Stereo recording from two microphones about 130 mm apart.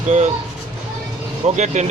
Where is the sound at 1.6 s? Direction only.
65° right (ahead or behind).